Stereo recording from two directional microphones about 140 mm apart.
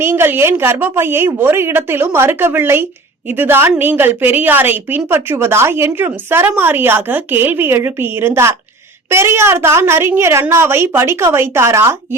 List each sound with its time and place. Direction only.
0.0 s a woman's voice: 15° right (ahead or behind)